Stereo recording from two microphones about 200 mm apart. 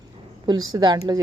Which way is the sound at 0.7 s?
20° right (ahead or behind).